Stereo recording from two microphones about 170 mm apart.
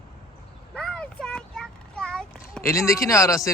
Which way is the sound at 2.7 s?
15° left (ahead or behind).